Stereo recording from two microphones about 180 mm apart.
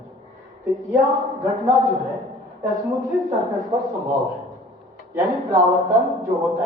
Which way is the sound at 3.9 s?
20° right (ahead or behind).